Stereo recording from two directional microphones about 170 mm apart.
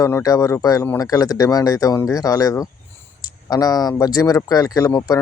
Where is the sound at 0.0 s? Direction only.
20° left (ahead or behind).